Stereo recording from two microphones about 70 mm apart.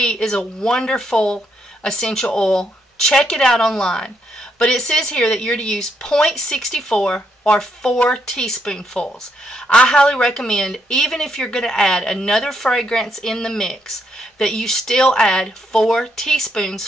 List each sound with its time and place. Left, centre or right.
0.0 s speech: centre